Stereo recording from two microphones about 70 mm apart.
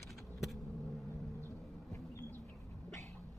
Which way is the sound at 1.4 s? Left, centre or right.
Left.